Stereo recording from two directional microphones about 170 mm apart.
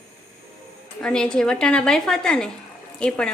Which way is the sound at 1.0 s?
5° left (ahead or behind).